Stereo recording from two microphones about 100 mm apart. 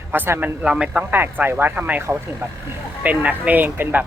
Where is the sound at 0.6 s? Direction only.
10° right (ahead or behind).